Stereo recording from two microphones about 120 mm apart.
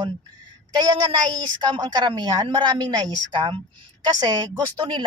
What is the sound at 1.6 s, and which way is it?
A woman's voice, 35° right (ahead or behind).